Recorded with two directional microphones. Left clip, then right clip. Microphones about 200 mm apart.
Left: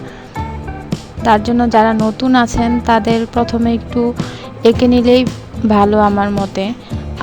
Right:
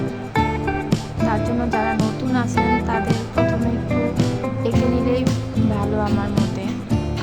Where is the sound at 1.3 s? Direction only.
40° left (ahead or behind).